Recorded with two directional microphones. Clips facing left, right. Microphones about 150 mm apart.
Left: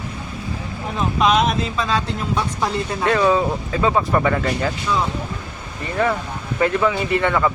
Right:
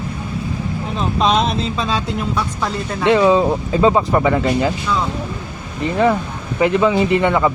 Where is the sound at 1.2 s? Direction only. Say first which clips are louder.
Even; 30° right (ahead or behind).